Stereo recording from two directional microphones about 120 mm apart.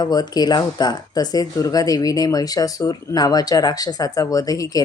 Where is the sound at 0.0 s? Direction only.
35° left (ahead or behind).